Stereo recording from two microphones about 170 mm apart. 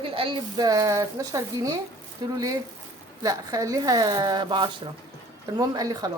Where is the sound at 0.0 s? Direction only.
30° right (ahead or behind).